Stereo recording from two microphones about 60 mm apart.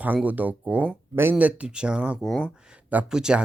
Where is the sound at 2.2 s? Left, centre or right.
Centre.